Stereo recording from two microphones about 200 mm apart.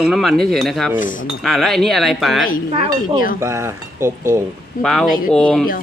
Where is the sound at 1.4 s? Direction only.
Centre (ahead or behind).